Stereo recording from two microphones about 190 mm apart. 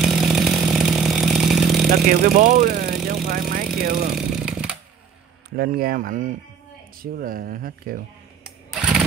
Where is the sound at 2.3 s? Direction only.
45° right (ahead or behind).